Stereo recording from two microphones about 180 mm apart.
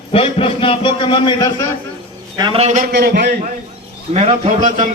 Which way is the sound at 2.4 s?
30° right (ahead or behind).